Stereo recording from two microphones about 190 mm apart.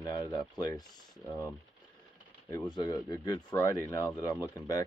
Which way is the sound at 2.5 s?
20° left (ahead or behind).